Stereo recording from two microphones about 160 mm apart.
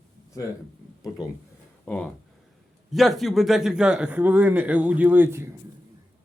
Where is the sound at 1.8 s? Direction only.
5° left (ahead or behind); by 5.5 s 15° right (ahead or behind).